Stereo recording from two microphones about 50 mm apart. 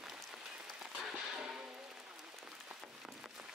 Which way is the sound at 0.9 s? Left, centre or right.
Centre.